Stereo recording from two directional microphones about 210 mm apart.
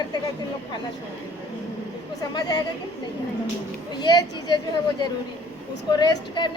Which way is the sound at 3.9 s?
20° left (ahead or behind).